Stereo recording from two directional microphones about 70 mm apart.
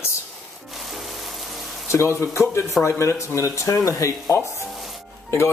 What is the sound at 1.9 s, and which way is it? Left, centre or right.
Speech, left.